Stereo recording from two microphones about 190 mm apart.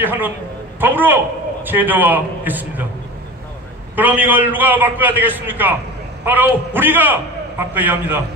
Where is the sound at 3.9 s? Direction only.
10° right (ahead or behind).